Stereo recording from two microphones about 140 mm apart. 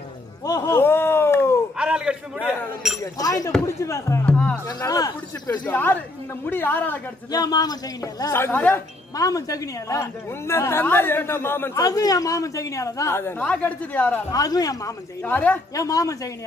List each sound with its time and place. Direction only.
0.5 s a sound: 25° left (ahead or behind)
1.8 s chink: 5° right (ahead or behind)
3.0 s a woman's voice: 25° left (ahead or behind)
4.3 s music: 5° left (ahead or behind)
4.7 s a woman's voice: 25° left (ahead or behind)
5.5 s speech: 15° left (ahead or behind)
7.2 s a woman's voice: 30° left (ahead or behind)
9.1 s a woman's voice: 25° left (ahead or behind)
14.3 s a woman's voice: 25° left (ahead or behind)
15.2 s speech: 10° left (ahead or behind)
15.7 s a woman's voice: 25° left (ahead or behind)